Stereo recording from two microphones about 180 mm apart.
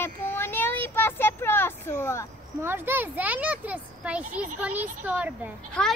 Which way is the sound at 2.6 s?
10° right (ahead or behind).